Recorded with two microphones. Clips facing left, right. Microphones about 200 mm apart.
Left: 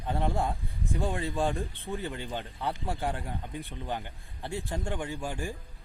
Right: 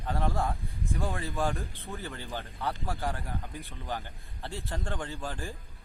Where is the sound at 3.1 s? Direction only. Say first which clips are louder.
Left 2 dB; 30° left (ahead or behind).